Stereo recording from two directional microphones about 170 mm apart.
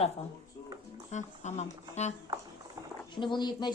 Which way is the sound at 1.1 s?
45° left (ahead or behind).